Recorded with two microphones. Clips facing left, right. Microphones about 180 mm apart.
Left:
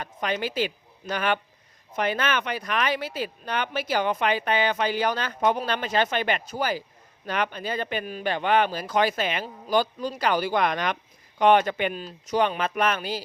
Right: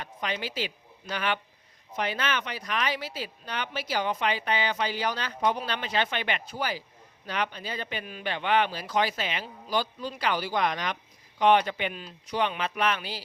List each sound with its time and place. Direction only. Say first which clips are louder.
0.0 s a woman's voice: left 5 dB; 45° left (ahead or behind)